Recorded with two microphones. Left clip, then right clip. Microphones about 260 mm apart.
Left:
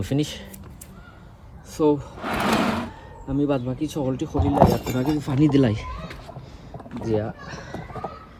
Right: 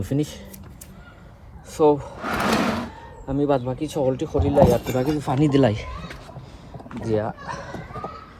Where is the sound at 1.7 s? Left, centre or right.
Centre.